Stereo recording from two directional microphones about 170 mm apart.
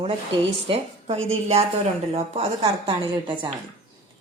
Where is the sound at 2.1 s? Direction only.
35° right (ahead or behind).